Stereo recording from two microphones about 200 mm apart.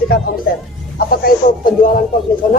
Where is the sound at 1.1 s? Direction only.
45° left (ahead or behind).